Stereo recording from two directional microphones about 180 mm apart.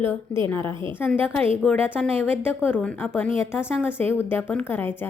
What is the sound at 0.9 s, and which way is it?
A woman's voice, 10° left (ahead or behind).